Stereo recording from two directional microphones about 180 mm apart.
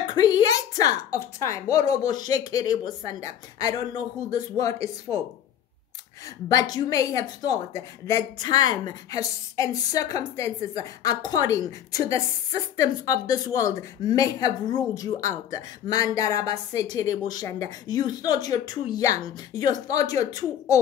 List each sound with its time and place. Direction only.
0.1 s a woman's voice: 20° left (ahead or behind)
6.2 s a woman's voice: 20° left (ahead or behind)